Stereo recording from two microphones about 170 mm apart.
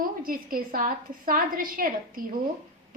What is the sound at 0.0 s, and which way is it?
A woman's voice, 55° right (ahead or behind).